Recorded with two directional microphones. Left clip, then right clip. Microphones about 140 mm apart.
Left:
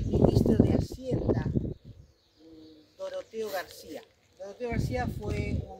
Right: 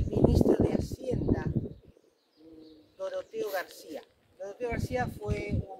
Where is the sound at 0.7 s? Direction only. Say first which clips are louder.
Left 1 dB; 15° left (ahead or behind).